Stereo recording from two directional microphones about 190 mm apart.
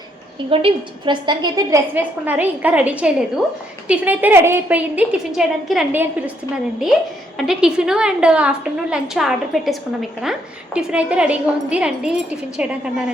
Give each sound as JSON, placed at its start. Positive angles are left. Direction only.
{"t": 0.5, "sound": "a woman's voice", "side_deg": -25}
{"t": 7.3, "sound": "a woman's voice", "side_deg": -5}